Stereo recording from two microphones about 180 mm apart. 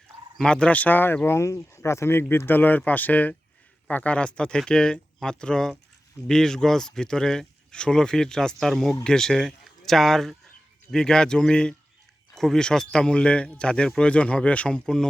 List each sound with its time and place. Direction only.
0.3 s speech: 5° left (ahead or behind)